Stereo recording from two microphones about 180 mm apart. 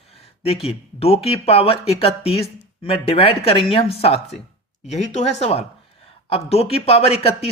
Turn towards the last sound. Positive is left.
turn(degrees=35)  # may be behind; listen again after turning